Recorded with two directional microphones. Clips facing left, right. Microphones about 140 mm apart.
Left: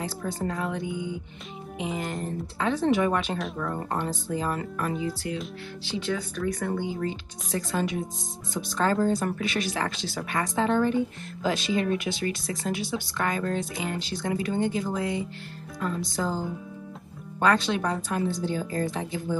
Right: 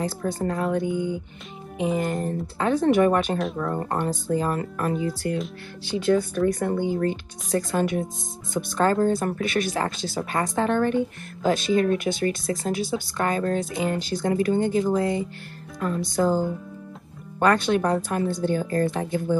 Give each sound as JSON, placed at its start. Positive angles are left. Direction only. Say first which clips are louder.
{"t": 0.0, "sound": "speech", "louder": "right 4 dB", "side_deg": -45}
{"t": 2.6, "sound": "speech", "louder": "right 5 dB", "side_deg": -45}
{"t": 6.3, "sound": "speech", "louder": "right 6 dB", "side_deg": -45}
{"t": 11.4, "sound": "speech", "louder": "right 5 dB", "side_deg": -50}
{"t": 16.0, "sound": "speech", "louder": "right 10 dB", "side_deg": -55}
{"t": 17.4, "sound": "speech", "louder": "right 3 dB", "side_deg": -50}